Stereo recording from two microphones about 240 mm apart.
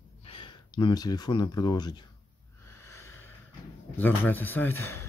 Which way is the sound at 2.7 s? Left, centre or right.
Left.